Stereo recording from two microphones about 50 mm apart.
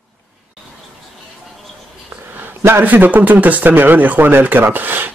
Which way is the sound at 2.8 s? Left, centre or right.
Right.